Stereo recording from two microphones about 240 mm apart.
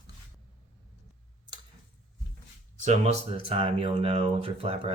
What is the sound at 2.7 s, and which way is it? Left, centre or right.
Speech, right.